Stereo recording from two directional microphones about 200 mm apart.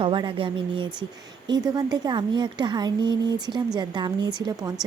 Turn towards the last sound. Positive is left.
turn(degrees=-20)  # may be behind; listen again after turning